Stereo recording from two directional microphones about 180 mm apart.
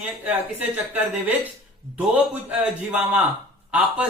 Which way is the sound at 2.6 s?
10° right (ahead or behind).